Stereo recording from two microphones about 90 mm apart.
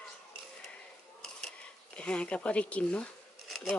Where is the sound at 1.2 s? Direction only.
5° left (ahead or behind).